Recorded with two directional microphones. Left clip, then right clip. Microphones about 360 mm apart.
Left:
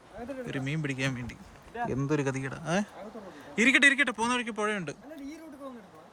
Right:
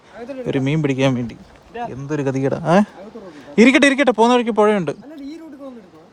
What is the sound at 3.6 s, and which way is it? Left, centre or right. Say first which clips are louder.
Speech: right 9 dB; centre.